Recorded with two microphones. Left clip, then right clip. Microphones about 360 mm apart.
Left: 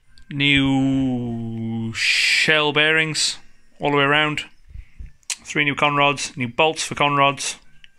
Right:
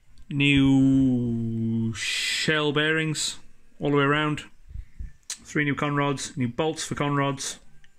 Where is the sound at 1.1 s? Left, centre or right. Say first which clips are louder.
Left 1 dB; centre.